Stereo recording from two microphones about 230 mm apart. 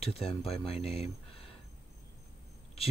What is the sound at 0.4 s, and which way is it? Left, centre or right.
Speech, left.